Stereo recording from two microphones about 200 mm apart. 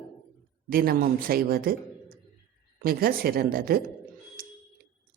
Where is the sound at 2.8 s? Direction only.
45° right (ahead or behind).